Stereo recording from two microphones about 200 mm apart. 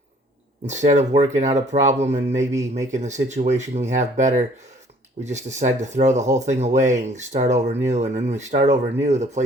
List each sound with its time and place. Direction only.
0.7 s speech: 35° right (ahead or behind)